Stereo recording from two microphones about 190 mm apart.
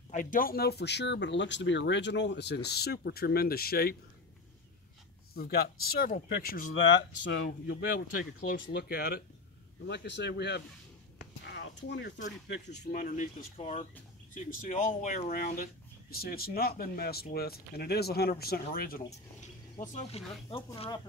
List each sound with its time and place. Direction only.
0.1 s speech: 45° left (ahead or behind)
5.3 s speech: 55° left (ahead or behind)
7.2 s speech: 75° left (ahead or behind)
7.9 s speech: 50° left (ahead or behind)
11.1 s a sound: 65° left (ahead or behind)
12.3 s speech: 65° left (ahead or behind); by 19.0 s 50° left (ahead or behind)
19.8 s speech: 35° left (ahead or behind)